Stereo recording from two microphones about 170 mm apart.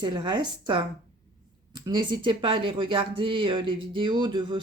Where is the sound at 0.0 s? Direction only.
25° right (ahead or behind).